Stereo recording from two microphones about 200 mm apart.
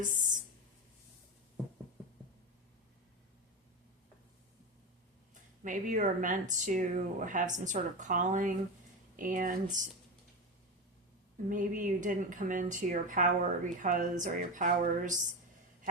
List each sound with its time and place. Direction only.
0.0 s speech: 40° right (ahead or behind)
5.3 s speech: 40° right (ahead or behind)
11.4 s speech: 40° right (ahead or behind)